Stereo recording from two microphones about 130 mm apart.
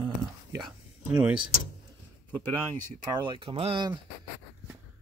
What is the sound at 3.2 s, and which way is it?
Speech, 40° right (ahead or behind).